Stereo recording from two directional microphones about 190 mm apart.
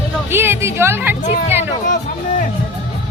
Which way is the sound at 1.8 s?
40° left (ahead or behind).